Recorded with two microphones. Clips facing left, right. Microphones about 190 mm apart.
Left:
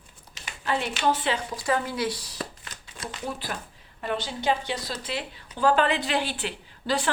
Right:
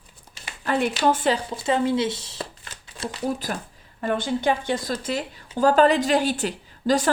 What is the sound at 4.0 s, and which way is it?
Speech, 50° right (ahead or behind).